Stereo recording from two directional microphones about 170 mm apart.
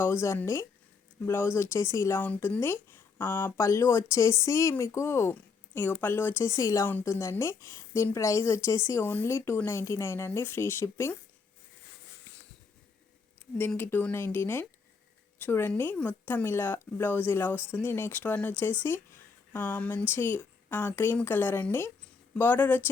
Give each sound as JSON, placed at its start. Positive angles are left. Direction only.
{"t": 0.0, "sound": "speech", "side_deg": 15}
{"t": 13.6, "sound": "speech", "side_deg": 10}